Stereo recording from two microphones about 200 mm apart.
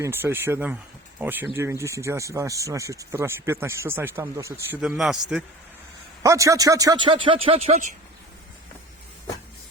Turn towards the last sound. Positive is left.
turn(degrees=-30)  # may be behind; listen again after turning